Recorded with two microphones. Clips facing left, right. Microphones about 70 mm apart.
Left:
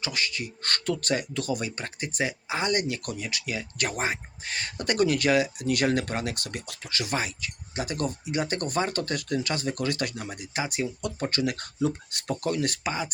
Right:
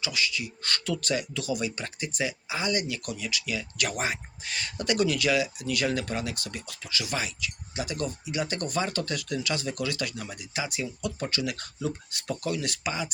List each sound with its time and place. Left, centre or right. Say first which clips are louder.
0.0 s speech: right 1 dB; left